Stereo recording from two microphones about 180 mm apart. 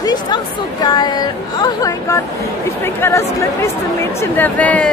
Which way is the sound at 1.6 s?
20° left (ahead or behind).